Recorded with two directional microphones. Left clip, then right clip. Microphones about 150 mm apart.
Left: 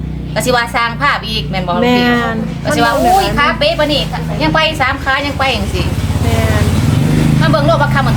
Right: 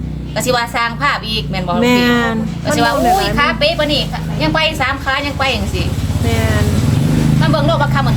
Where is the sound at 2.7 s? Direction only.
10° right (ahead or behind).